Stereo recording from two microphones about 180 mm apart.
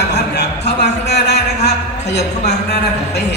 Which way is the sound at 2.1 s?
70° left (ahead or behind).